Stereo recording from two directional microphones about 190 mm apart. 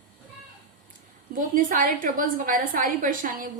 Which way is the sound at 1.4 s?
45° right (ahead or behind).